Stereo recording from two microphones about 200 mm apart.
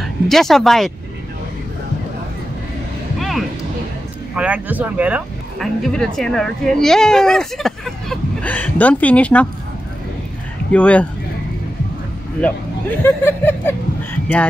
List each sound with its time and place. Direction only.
0.3 s speech: centre (ahead or behind)
3.2 s a sound: centre (ahead or behind)
4.4 s speech: 5° right (ahead or behind)
10.7 s speech: 5° left (ahead or behind)
13.0 s speech: 10° left (ahead or behind)